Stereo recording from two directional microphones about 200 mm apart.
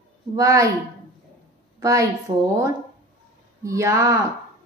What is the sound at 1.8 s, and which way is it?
A woman's voice, 15° right (ahead or behind).